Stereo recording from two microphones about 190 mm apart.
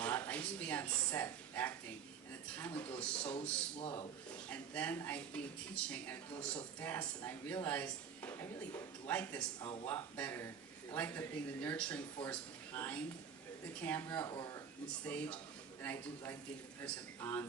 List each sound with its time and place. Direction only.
0.0 s speech: 5° left (ahead or behind)
3.8 s a man's voice: 25° left (ahead or behind)
4.4 s speech: 10° left (ahead or behind)
9.6 s a man's voice: 25° left (ahead or behind)
9.8 s speech: 10° left (ahead or behind)
15.0 s speech: 5° left (ahead or behind)